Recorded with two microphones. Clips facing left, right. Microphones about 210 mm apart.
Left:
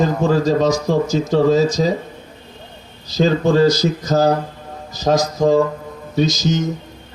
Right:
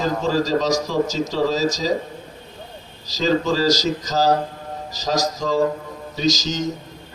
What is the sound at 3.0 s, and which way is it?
A man's voice, 55° left (ahead or behind).